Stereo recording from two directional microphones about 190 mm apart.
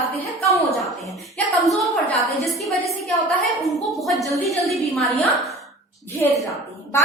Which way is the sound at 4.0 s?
Centre (ahead or behind).